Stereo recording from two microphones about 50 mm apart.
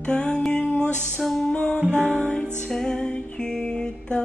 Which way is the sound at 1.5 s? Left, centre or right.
Left.